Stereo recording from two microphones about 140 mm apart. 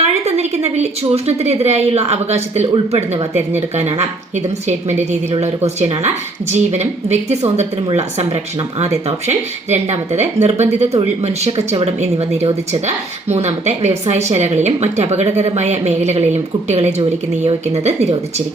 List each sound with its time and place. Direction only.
0.0 s a woman's voice: 50° right (ahead or behind)
5.4 s speech: 50° right (ahead or behind)
8.8 s speech: 50° right (ahead or behind)